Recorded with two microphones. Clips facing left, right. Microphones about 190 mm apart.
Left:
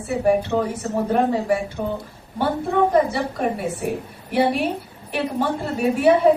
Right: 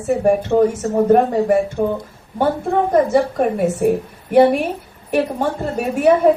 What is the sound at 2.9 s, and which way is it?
A woman's voice, 45° right (ahead or behind).